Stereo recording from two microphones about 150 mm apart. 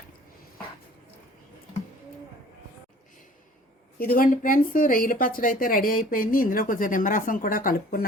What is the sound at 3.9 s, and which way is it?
Speech, 75° left (ahead or behind).